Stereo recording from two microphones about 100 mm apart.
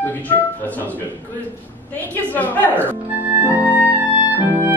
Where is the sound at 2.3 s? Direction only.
15° left (ahead or behind).